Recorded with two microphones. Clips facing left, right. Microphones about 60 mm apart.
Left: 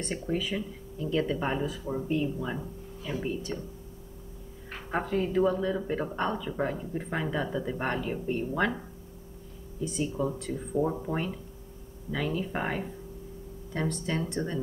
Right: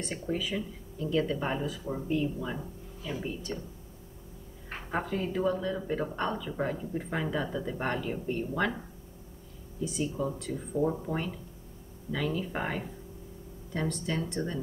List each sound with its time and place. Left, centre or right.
0.0 s speech: centre
4.9 s speech: centre
10.1 s speech: centre